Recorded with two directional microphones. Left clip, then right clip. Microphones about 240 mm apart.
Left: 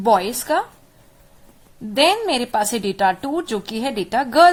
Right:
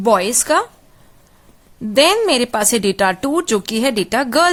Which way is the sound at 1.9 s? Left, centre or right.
Right.